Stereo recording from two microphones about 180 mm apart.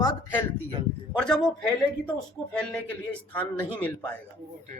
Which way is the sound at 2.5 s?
5° left (ahead or behind).